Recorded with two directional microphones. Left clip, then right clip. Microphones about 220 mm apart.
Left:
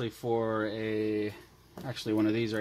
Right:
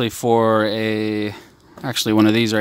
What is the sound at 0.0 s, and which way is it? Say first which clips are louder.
Speech: right 14 dB; 45° right (ahead or behind).